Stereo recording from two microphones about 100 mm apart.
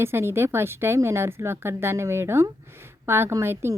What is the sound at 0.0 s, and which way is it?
A woman's voice, 25° right (ahead or behind).